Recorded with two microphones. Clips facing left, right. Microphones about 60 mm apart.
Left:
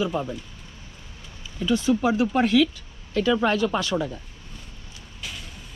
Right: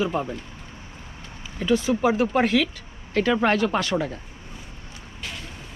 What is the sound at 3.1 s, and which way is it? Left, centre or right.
Speech, right.